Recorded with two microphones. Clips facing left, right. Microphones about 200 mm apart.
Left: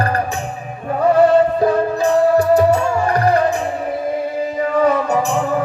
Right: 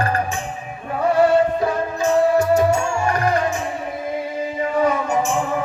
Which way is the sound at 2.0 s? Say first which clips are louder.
Left 1 dB; 35° left (ahead or behind).